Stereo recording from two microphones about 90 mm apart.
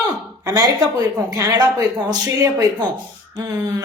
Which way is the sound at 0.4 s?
40° right (ahead or behind).